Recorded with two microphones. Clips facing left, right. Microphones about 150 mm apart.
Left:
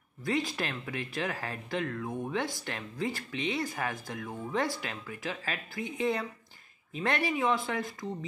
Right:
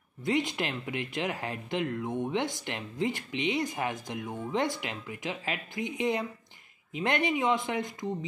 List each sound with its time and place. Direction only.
0.2 s speech: 20° right (ahead or behind)